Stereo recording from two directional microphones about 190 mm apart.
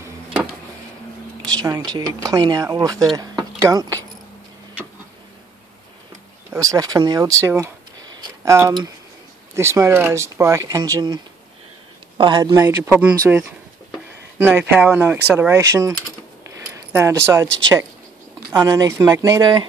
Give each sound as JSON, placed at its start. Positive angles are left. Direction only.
{"t": 1.4, "sound": "speech", "side_deg": -20}
{"t": 6.5, "sound": "speech", "side_deg": -15}
{"t": 12.2, "sound": "speech", "side_deg": -25}
{"t": 16.9, "sound": "speech", "side_deg": -15}
{"t": 18.5, "sound": "speech", "side_deg": -20}